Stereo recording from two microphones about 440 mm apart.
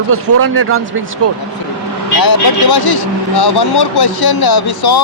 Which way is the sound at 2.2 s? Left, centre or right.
Left.